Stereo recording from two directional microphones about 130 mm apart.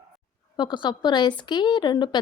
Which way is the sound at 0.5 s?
35° left (ahead or behind).